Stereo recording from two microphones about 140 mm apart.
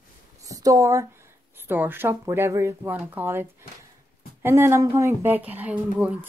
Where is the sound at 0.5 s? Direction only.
25° right (ahead or behind).